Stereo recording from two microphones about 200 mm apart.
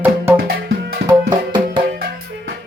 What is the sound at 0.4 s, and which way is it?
Music, 50° right (ahead or behind).